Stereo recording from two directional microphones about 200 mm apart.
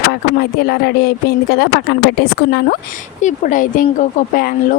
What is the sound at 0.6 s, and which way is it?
A woman's voice, 55° left (ahead or behind).